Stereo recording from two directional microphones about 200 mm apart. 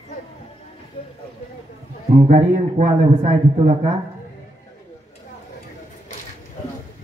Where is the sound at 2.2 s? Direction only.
35° right (ahead or behind).